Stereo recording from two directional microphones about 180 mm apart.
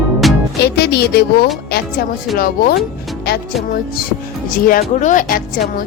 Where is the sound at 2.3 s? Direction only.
55° left (ahead or behind).